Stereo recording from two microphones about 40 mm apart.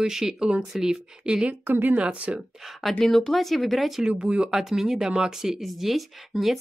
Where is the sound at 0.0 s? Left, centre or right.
Centre; by 2.3 s right.